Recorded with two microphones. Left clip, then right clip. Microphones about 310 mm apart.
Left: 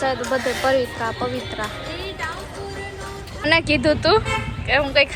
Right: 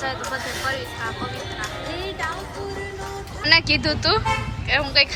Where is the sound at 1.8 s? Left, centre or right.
Right.